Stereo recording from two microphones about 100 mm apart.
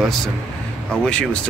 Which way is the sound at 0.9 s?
10° left (ahead or behind).